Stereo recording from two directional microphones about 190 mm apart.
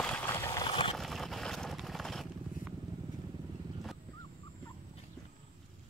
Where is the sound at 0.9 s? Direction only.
Centre (ahead or behind).